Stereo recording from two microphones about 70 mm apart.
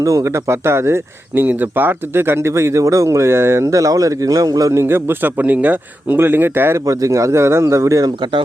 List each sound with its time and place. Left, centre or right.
0.0 s speech: right
1.5 s speech: right
6.8 s a man's voice: right